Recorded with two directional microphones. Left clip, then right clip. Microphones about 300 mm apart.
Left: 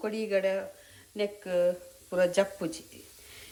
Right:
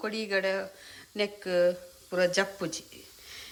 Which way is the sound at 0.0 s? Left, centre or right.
Centre.